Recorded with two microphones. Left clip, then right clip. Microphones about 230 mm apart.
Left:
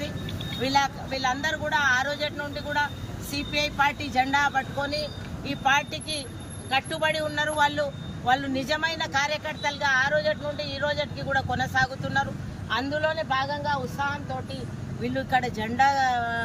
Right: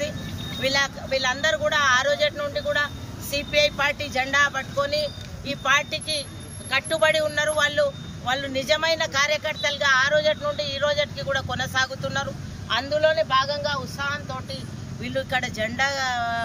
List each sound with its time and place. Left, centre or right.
0.6 s speech: centre